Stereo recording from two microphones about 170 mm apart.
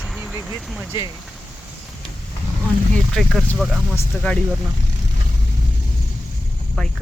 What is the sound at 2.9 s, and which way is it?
Speech, 5° left (ahead or behind).